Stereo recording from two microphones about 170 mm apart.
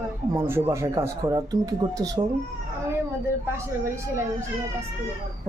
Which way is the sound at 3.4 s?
15° right (ahead or behind).